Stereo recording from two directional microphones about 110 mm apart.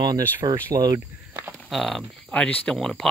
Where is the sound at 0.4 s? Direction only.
45° right (ahead or behind).